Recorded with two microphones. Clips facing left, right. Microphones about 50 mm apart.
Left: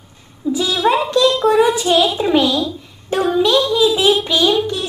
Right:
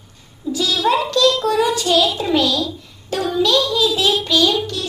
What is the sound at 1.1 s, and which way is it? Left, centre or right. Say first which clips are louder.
A child's voice: left 3 dB; left.